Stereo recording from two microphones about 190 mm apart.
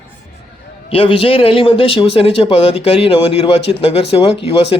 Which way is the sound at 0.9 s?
30° left (ahead or behind).